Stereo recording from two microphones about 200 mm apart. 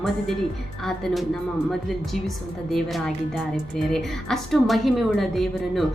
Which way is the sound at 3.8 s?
Centre (ahead or behind).